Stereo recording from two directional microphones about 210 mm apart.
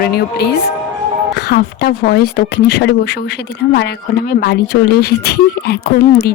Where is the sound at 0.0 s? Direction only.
50° left (ahead or behind).